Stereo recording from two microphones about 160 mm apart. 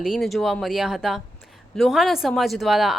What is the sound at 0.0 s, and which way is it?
A woman's voice, centre (ahead or behind).